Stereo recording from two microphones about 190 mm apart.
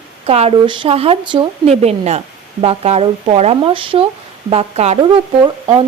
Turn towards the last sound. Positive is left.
turn(degrees=-25)  # may be behind; listen again after turning